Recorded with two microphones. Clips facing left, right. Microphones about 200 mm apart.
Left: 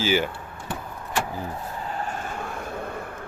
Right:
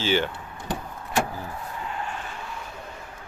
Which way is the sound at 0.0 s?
10° left (ahead or behind).